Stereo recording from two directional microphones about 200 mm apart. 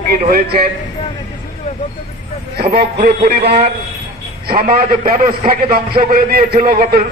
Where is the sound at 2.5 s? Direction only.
55° right (ahead or behind).